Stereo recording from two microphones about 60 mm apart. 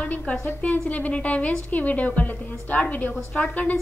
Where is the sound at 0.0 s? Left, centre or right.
Left.